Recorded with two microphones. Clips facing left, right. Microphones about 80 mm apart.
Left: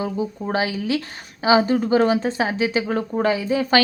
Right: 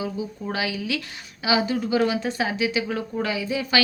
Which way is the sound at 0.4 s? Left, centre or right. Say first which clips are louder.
Left 4 dB; left.